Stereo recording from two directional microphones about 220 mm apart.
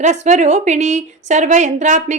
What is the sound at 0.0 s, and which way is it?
A woman's voice, 30° right (ahead or behind).